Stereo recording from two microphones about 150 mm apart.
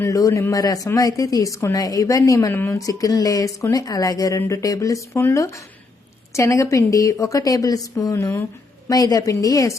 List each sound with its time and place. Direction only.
0.0 s speech: 20° left (ahead or behind)